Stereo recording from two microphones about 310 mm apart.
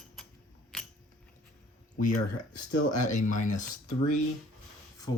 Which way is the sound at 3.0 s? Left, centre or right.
Left.